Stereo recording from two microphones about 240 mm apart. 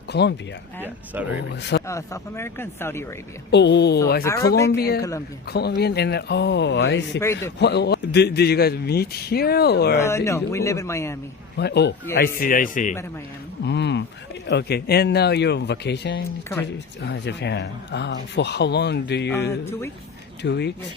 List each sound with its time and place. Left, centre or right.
0.1 s a man's voice: left
1.9 s speech: centre
3.5 s a man's voice: left
4.2 s speech: centre
4.7 s a man's voice: left
10.0 s speech: centre
11.5 s a man's voice: left
13.7 s a sound: left
14.4 s a man's voice: left
20.4 s a man's voice: left